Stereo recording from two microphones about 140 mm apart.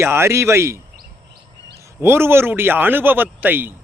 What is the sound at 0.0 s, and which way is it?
Speech, 20° right (ahead or behind).